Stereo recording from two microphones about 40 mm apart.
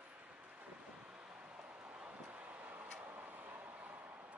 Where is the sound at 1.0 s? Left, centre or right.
Right.